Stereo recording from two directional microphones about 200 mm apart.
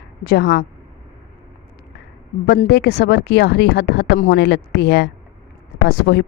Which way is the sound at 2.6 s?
55° left (ahead or behind).